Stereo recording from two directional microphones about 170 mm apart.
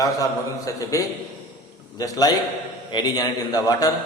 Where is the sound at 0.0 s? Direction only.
20° left (ahead or behind).